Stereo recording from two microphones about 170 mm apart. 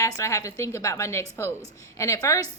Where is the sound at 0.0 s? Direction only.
20° left (ahead or behind).